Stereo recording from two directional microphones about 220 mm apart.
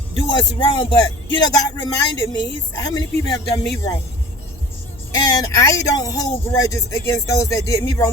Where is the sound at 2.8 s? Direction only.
15° left (ahead or behind).